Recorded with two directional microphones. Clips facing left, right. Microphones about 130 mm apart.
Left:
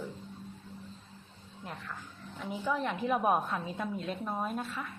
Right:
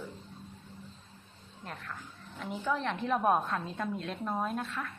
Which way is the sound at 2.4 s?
5° left (ahead or behind).